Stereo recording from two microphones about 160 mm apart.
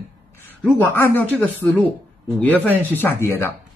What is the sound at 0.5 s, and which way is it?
Speech, 10° left (ahead or behind).